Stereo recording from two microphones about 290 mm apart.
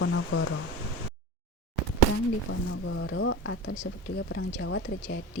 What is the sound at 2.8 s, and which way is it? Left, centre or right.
Speech, left.